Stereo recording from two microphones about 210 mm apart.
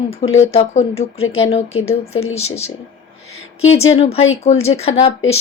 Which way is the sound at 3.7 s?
30° left (ahead or behind).